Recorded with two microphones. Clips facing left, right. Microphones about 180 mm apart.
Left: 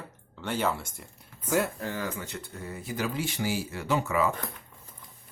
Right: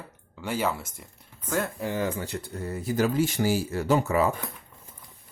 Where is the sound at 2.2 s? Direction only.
35° right (ahead or behind).